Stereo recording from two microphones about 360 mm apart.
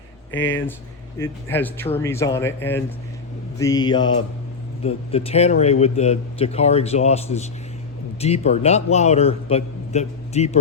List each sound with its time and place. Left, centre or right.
0.3 s speech: left
1.2 s speech: centre